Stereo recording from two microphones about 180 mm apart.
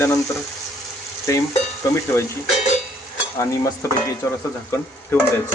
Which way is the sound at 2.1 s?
15° left (ahead or behind).